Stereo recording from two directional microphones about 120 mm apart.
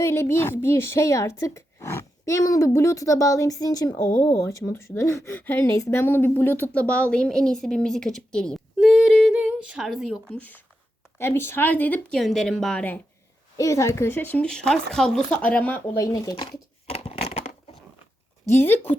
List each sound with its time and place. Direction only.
0.0 s a woman's voice: 20° left (ahead or behind); by 10.2 s centre (ahead or behind)
10.3 s speech: 15° left (ahead or behind)
12.2 s a woman's voice: centre (ahead or behind)
13.6 s speech: 25° left (ahead or behind)
16.0 s a woman's voice: 25° left (ahead or behind)
16.9 s a sound: 55° left (ahead or behind)
18.4 s a woman's voice: 20° left (ahead or behind)